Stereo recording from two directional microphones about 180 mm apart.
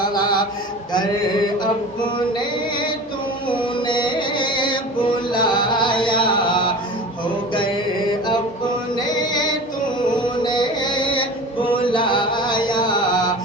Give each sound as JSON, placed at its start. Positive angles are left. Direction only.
{"t": 0.0, "sound": "mantra", "side_deg": 25}
{"t": 3.5, "sound": "music", "side_deg": 30}
{"t": 9.0, "sound": "music", "side_deg": 20}
{"t": 11.8, "sound": "chant", "side_deg": 25}